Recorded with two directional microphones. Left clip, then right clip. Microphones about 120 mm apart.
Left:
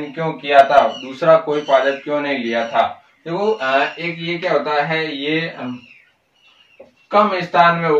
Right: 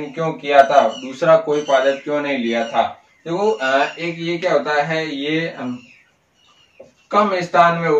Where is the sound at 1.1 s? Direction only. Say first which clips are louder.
Left 1 dB; 40° right (ahead or behind); by 5.6 s 20° right (ahead or behind).